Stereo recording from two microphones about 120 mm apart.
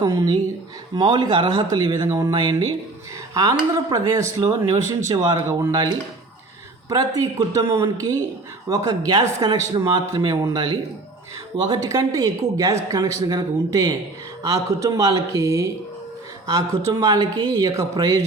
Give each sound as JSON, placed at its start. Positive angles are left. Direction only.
{"t": 0.1, "sound": "speech", "side_deg": -30}
{"t": 2.3, "sound": "speech", "side_deg": -40}
{"t": 6.9, "sound": "speech", "side_deg": -30}